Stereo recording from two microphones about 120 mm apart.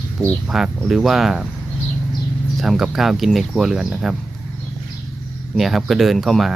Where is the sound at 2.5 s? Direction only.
Centre (ahead or behind).